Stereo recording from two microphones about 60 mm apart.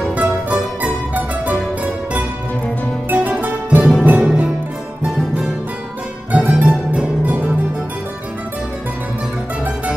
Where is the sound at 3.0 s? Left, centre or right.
Right.